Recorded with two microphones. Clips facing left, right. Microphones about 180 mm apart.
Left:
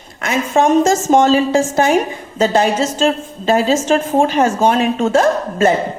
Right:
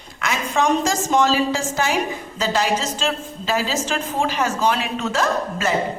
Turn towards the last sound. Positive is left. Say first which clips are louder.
# left 8 dB
turn(degrees=50)  # may be behind; listen again after turning